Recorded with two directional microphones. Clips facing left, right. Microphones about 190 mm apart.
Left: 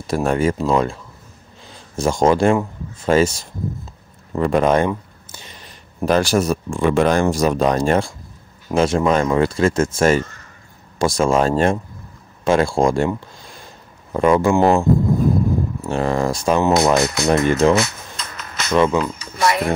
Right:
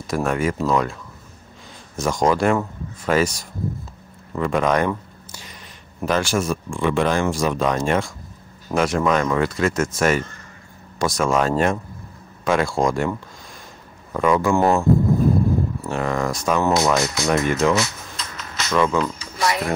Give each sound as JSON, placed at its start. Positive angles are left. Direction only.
{"t": 0.0, "sound": "speech", "side_deg": 30}
{"t": 2.0, "sound": "speech", "side_deg": 30}
{"t": 4.3, "sound": "a sound", "side_deg": 35}
{"t": 6.0, "sound": "speech", "side_deg": 35}
{"t": 14.1, "sound": "speech", "side_deg": 30}
{"t": 14.5, "sound": "speech", "side_deg": 15}
{"t": 15.9, "sound": "speech", "side_deg": 30}
{"t": 16.7, "sound": "speech", "side_deg": 60}
{"t": 17.5, "sound": "speech", "side_deg": 30}
{"t": 17.7, "sound": "a sound", "side_deg": 60}
{"t": 18.7, "sound": "speech", "side_deg": 20}
{"t": 19.3, "sound": "a sound", "side_deg": 55}